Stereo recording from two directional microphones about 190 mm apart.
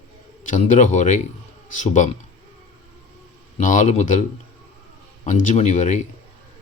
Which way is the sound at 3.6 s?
40° left (ahead or behind).